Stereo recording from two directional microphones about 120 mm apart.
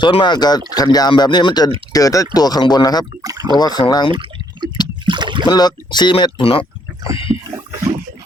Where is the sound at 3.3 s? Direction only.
35° right (ahead or behind).